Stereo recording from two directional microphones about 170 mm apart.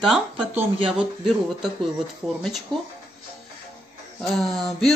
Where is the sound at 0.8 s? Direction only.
5° right (ahead or behind).